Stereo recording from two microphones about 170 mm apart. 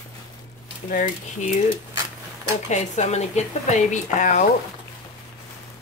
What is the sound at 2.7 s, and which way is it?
Speech, 40° left (ahead or behind).